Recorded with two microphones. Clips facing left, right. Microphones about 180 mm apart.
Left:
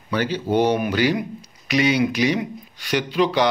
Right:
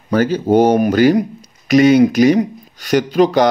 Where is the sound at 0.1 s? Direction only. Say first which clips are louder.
Right 8 dB; 45° right (ahead or behind).